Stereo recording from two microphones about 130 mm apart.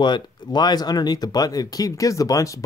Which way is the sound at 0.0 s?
35° left (ahead or behind).